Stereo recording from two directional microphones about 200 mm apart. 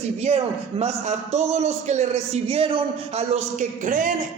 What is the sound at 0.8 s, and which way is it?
A man's voice, 35° right (ahead or behind).